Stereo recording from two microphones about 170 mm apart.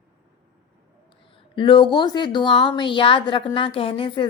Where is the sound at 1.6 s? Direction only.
30° left (ahead or behind).